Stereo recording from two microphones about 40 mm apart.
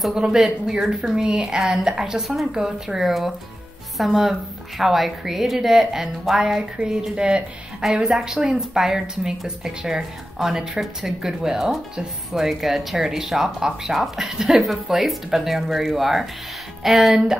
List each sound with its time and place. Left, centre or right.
0.1 s a woman's voice: centre
3.1 s a woman's voice: centre
6.8 s a woman's voice: right; by 17.2 s centre